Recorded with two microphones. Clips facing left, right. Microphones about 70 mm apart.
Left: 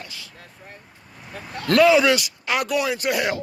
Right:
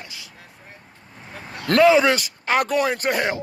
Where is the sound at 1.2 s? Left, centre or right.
Right.